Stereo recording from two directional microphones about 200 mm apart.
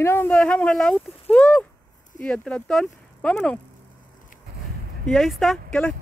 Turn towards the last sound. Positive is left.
turn(degrees=5)  # may be behind; listen again after turning